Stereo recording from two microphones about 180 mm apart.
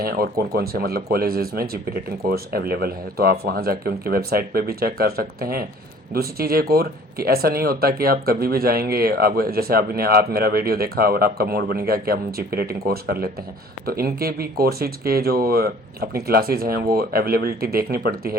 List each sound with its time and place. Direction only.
0.0 s speech: 55° right (ahead or behind)